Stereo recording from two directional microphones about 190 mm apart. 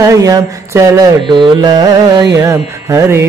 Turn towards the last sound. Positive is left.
turn(degrees=-15)  # may be behind; listen again after turning